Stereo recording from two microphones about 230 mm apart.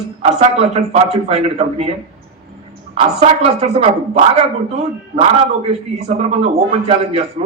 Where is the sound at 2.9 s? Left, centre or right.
Right.